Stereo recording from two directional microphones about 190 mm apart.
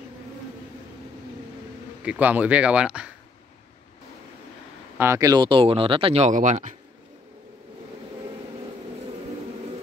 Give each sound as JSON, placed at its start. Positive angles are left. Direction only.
{"t": 2.0, "sound": "speech", "side_deg": -10}
{"t": 4.9, "sound": "speech", "side_deg": -15}